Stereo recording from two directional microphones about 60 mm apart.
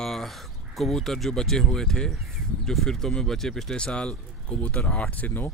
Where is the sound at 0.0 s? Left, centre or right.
Centre.